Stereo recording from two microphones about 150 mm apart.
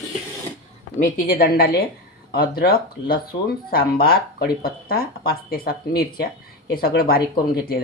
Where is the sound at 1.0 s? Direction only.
65° left (ahead or behind).